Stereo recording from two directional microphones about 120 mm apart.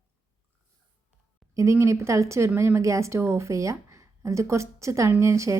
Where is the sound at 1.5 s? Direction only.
25° right (ahead or behind).